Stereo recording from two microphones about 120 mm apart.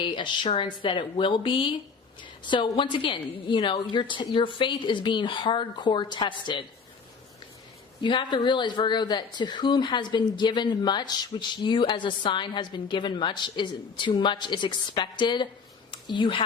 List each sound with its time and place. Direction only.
0.0 s a woman's voice: 40° left (ahead or behind)
8.0 s a woman's voice: 40° left (ahead or behind)